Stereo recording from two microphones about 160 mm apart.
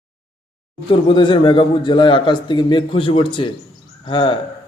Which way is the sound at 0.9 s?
30° left (ahead or behind).